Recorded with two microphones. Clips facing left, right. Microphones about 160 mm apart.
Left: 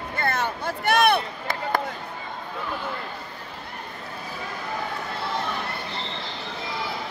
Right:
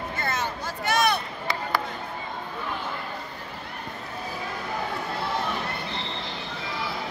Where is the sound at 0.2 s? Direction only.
60° left (ahead or behind).